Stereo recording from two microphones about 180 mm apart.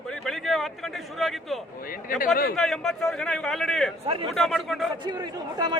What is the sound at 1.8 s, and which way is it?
Speech, 50° left (ahead or behind).